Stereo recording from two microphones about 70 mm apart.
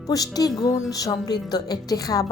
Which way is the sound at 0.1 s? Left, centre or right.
Left.